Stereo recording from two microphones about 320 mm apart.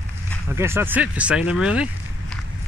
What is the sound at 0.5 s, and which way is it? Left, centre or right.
Speech, centre.